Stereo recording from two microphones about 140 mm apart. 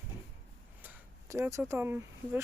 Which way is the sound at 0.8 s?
15° right (ahead or behind).